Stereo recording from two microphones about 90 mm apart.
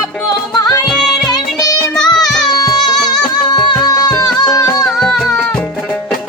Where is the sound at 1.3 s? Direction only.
45° left (ahead or behind).